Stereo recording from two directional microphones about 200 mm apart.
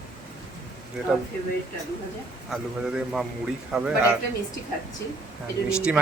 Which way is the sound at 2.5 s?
Centre (ahead or behind).